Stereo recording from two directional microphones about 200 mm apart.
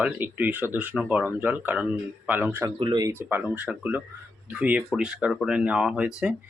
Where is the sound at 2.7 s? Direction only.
25° right (ahead or behind).